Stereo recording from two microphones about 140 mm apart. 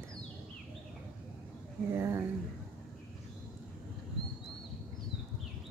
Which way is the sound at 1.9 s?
20° right (ahead or behind).